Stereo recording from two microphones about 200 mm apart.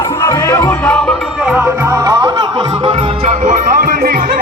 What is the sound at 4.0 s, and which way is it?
Speech, 45° right (ahead or behind).